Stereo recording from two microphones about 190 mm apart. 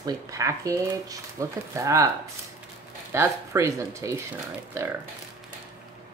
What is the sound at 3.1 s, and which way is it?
Speech, 15° right (ahead or behind).